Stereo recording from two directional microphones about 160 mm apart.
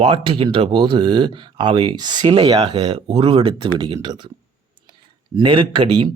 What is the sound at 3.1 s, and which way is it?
A man's voice, 35° right (ahead or behind).